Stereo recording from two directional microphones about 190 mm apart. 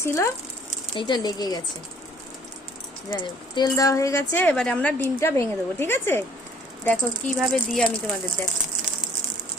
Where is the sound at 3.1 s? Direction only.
25° left (ahead or behind).